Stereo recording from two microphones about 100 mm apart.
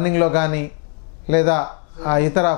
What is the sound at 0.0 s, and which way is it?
Speech, 15° left (ahead or behind).